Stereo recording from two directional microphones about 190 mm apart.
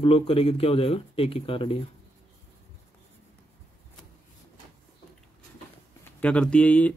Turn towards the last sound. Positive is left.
turn(degrees=5)  # may be behind; listen again after turning